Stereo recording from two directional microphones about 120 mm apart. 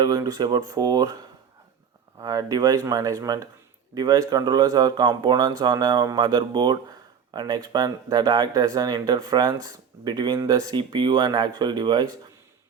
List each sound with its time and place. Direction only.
0.0 s speech: 30° right (ahead or behind)
2.2 s speech: 35° right (ahead or behind)